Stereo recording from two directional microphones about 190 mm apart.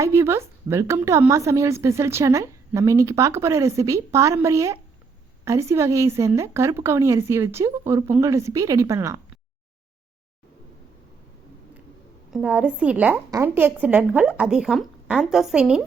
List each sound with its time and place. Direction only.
0.0 s a woman's voice: 15° right (ahead or behind)
12.3 s a woman's voice: 5° right (ahead or behind)